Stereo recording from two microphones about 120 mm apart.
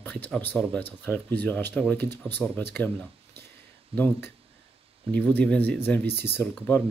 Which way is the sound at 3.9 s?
15° left (ahead or behind).